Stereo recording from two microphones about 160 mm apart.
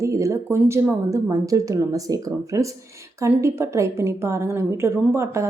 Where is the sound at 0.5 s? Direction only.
15° right (ahead or behind).